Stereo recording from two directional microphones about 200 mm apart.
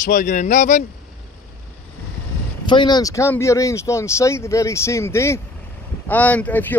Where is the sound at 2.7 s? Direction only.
20° left (ahead or behind).